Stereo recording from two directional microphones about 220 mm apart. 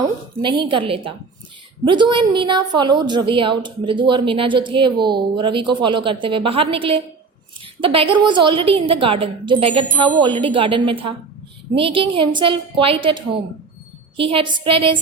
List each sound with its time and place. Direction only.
0.0 s a woman's voice: 20° right (ahead or behind)